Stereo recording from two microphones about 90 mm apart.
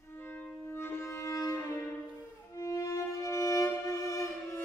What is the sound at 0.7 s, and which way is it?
Music, 30° left (ahead or behind).